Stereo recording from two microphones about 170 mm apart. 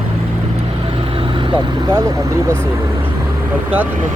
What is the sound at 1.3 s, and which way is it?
Vehicle, 30° right (ahead or behind).